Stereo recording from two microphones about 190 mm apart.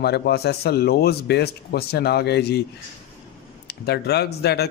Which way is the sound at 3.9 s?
60° left (ahead or behind).